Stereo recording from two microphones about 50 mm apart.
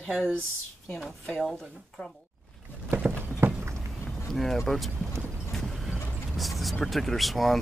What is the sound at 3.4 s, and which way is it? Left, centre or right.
Vehicle, right.